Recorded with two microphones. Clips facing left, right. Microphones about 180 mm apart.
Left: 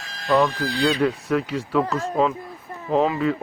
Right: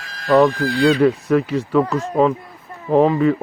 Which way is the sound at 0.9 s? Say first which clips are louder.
Right 7 dB; centre (ahead or behind).